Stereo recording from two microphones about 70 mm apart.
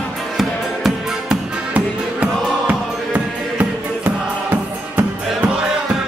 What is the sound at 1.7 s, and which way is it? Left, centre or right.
Music, centre.